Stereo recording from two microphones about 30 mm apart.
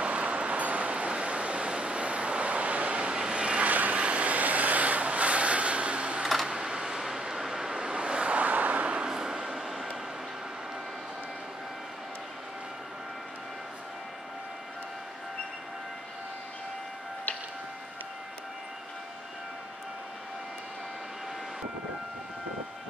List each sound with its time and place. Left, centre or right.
0.0 s vehicle: right
3.0 s vehicle: right
3.3 s vehicle: right
3.6 s vehicle: right
4.0 s vehicle: right
6.4 s a sound: centre
7.0 s vehicle: centre
7.7 s vehicle: right
8.5 s vehicle: right
9.0 s a sound: right
9.7 s vehicle: centre